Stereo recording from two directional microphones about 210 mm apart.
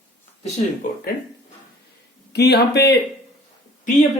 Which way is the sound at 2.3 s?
50° left (ahead or behind).